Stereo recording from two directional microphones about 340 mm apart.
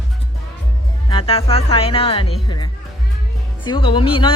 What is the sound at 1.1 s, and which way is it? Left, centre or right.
Speech, centre.